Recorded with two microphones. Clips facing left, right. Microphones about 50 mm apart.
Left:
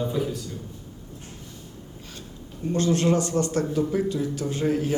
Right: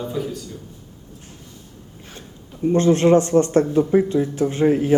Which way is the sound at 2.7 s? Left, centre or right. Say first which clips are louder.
Right 7 dB; right.